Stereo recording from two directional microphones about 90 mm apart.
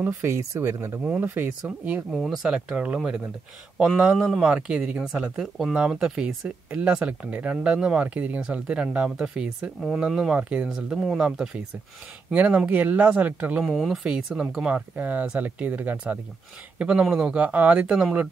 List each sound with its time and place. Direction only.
0.0 s speech: 30° right (ahead or behind)
2.1 s speech: centre (ahead or behind); by 13.6 s 15° right (ahead or behind)
13.6 s speech: centre (ahead or behind)